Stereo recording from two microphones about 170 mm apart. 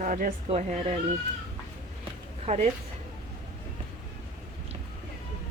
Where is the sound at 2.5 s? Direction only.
40° right (ahead or behind).